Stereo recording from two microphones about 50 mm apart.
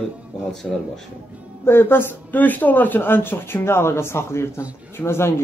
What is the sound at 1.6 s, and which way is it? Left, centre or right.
Speech, left.